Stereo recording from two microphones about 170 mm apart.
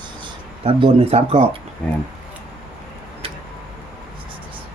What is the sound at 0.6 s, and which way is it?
Speech, 35° right (ahead or behind).